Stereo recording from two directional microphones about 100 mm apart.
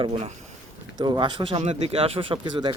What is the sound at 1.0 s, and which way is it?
Speech, 50° right (ahead or behind).